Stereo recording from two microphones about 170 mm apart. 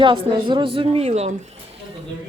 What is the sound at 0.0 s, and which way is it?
A woman's voice, 30° right (ahead or behind).